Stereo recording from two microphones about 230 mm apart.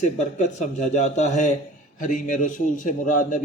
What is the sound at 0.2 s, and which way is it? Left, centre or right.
A man's voice, left.